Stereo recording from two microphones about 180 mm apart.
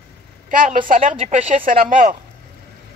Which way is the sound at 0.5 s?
50° right (ahead or behind).